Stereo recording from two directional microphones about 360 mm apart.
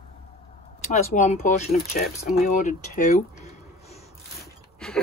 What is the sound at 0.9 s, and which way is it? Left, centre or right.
Speech, centre.